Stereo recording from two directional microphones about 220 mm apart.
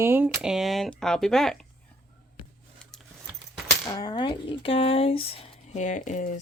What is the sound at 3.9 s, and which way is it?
Speech, 20° left (ahead or behind).